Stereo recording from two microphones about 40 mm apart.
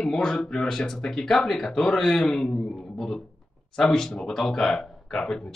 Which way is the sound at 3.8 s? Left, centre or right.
Centre.